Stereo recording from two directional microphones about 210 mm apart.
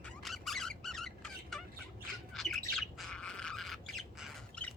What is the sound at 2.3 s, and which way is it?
Bird, centre (ahead or behind).